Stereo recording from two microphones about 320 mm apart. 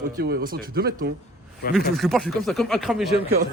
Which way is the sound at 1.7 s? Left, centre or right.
Centre.